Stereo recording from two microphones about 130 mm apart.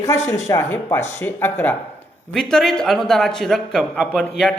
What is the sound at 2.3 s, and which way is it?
A man's voice, 5° left (ahead or behind).